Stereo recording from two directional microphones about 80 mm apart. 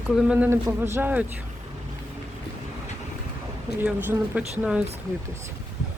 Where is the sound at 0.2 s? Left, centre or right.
Centre.